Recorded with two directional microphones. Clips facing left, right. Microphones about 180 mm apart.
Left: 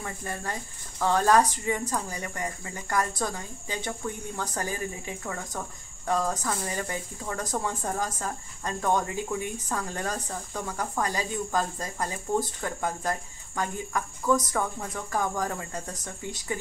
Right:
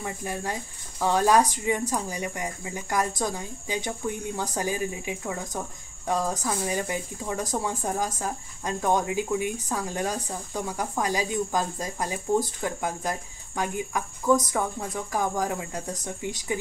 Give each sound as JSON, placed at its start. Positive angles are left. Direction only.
{"t": 0.0, "sound": "speech", "side_deg": -10}